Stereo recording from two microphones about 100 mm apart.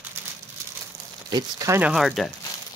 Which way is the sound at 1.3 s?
40° right (ahead or behind).